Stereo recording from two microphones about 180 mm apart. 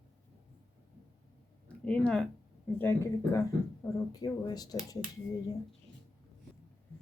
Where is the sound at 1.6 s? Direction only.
5° left (ahead or behind); by 4.8 s 20° left (ahead or behind).